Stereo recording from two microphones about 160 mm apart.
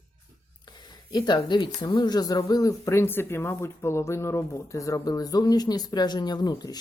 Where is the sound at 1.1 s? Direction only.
25° left (ahead or behind).